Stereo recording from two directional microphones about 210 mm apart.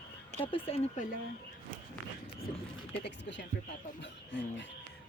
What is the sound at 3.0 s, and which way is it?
Speech, 55° left (ahead or behind).